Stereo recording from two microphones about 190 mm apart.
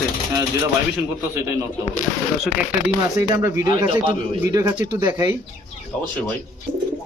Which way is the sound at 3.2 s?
15° right (ahead or behind).